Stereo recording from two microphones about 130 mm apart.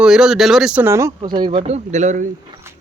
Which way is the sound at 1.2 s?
35° right (ahead or behind).